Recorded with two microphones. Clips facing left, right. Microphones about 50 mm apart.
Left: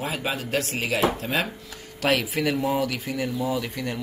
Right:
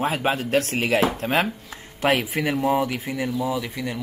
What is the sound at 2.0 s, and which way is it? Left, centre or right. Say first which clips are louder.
Speech: right 2 dB; right.